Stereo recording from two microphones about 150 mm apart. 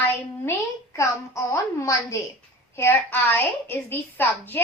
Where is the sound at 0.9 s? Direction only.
20° left (ahead or behind).